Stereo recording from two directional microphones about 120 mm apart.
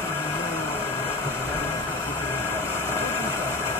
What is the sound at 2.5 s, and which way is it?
Vehicle, 20° left (ahead or behind).